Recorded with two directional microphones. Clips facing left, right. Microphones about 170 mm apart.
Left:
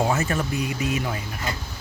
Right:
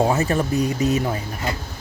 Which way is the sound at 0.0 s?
35° right (ahead or behind).